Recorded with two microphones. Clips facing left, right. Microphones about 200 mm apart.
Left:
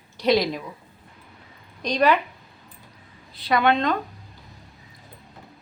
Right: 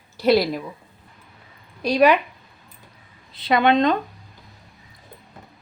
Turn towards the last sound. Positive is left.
turn(degrees=-20)  # may be behind; listen again after turning